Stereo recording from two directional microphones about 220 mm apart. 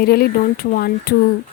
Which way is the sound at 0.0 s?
45° left (ahead or behind).